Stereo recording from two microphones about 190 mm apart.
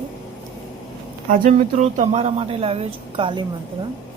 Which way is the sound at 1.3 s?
45° right (ahead or behind).